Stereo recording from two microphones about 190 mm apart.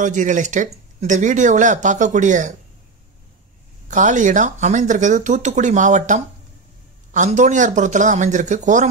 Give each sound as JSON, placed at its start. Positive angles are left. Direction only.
{"t": 0.0, "sound": "speech", "side_deg": -40}
{"t": 3.9, "sound": "speech", "side_deg": -40}